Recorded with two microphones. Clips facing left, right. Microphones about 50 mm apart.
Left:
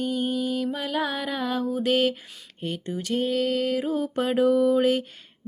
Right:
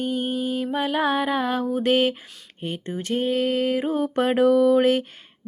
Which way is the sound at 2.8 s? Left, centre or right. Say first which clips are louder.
Right 2 dB; right.